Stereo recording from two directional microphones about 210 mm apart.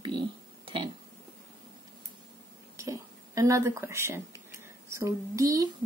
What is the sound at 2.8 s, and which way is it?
A woman's voice, 15° right (ahead or behind).